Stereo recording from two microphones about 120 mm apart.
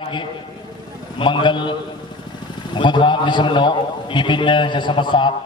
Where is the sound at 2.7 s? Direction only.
45° left (ahead or behind).